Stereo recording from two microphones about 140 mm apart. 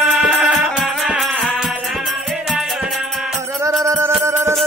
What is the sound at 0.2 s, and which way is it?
Music, centre (ahead or behind).